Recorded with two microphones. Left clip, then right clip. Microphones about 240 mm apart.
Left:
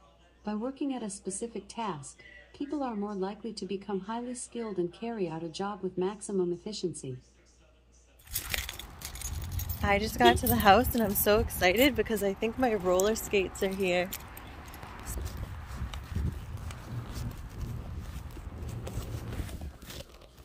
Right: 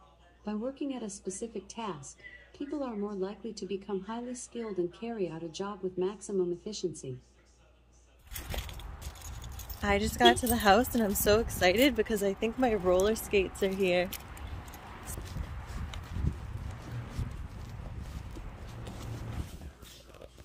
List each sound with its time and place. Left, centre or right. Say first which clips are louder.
0.5 s speech: left 2 dB; left
9.8 s a woman's voice: left 1 dB; centre